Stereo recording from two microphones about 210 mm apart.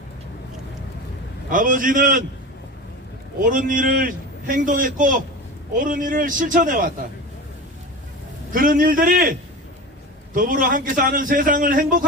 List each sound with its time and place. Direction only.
1.5 s a man's voice: 40° right (ahead or behind)
3.4 s a man's voice: 40° right (ahead or behind)
8.5 s a man's voice: 40° right (ahead or behind)